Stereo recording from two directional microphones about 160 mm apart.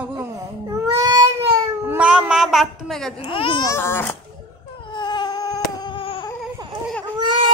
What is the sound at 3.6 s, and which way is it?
Speech, 15° left (ahead or behind).